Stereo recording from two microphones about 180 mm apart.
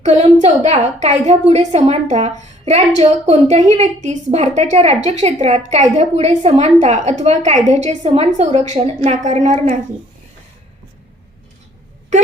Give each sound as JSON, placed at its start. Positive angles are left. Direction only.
{"t": 0.0, "sound": "a woman's voice", "side_deg": -40}